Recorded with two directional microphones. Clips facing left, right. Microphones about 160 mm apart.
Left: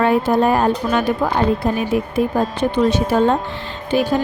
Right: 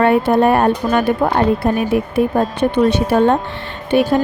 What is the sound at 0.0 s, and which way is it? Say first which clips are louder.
Speech: right 3 dB; 65° right (ahead or behind).